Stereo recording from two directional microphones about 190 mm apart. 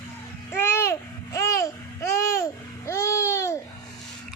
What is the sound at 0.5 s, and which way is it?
Babbling, 10° left (ahead or behind).